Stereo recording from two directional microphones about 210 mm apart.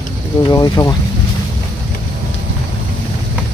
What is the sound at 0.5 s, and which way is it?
Speech, 20° left (ahead or behind).